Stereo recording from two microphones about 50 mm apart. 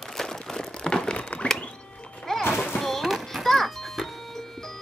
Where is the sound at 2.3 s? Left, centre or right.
Centre.